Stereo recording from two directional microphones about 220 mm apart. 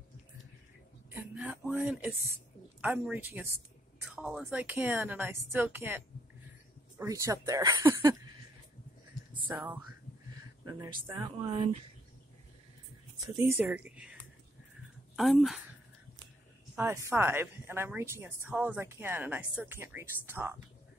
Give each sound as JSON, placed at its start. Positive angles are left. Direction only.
{"t": 1.1, "sound": "a sound", "side_deg": -5}
{"t": 2.8, "sound": "a woman's voice", "side_deg": -10}
{"t": 9.5, "sound": "a woman's voice", "side_deg": -10}
{"t": 13.5, "sound": "speech", "side_deg": -10}
{"t": 16.7, "sound": "a woman's voice", "side_deg": -10}